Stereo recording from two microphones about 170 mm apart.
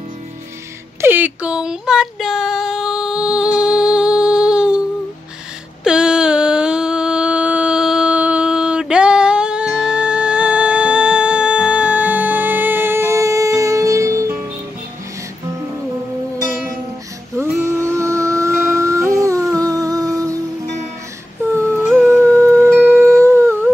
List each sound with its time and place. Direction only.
1.0 s female singing: 10° right (ahead or behind)
5.9 s mantra: 5° right (ahead or behind)
17.4 s music: 15° right (ahead or behind)
21.4 s humming: 15° right (ahead or behind)
22.0 s howl: 15° right (ahead or behind)